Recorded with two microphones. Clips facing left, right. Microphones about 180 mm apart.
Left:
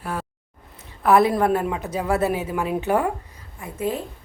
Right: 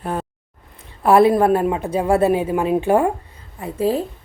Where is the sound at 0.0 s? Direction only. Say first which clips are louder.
Right 5 dB; 20° right (ahead or behind).